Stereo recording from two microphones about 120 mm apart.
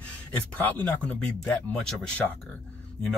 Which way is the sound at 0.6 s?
15° left (ahead or behind).